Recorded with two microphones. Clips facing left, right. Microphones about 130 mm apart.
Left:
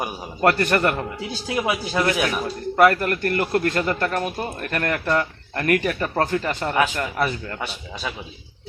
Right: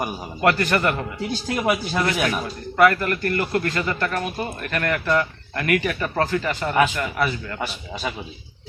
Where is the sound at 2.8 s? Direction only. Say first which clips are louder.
Left 1 dB; 40° left (ahead or behind).